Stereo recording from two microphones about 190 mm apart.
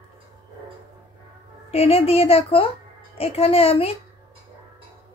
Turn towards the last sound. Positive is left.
turn(degrees=30)  # may be behind; listen again after turning